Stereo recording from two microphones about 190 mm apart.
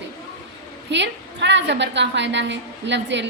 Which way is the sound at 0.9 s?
70° right (ahead or behind).